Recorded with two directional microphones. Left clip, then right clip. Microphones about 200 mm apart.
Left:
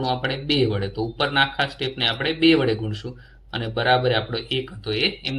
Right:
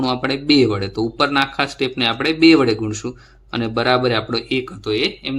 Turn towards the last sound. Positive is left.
turn(degrees=-30)  # may be behind; listen again after turning